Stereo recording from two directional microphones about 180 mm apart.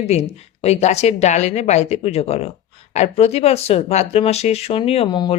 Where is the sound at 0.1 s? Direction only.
35° left (ahead or behind).